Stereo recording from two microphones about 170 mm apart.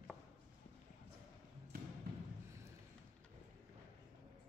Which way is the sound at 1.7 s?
60° right (ahead or behind).